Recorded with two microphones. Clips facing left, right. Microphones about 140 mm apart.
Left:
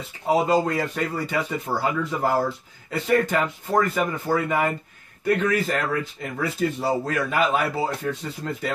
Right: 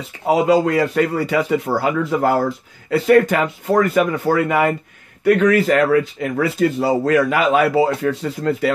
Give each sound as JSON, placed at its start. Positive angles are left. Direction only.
{"t": 0.3, "sound": "speech", "side_deg": -85}